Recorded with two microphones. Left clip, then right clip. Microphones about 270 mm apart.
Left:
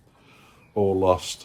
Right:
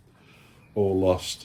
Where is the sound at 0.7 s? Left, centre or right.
Centre.